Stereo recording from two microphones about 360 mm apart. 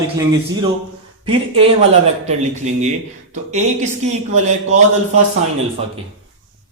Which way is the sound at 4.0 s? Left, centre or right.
Centre.